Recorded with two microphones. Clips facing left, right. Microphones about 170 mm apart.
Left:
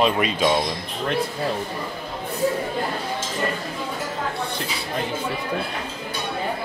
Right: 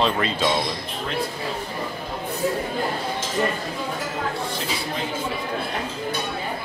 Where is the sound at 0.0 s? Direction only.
15° left (ahead or behind).